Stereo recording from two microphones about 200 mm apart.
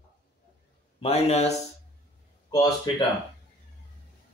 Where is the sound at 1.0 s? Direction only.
30° left (ahead or behind).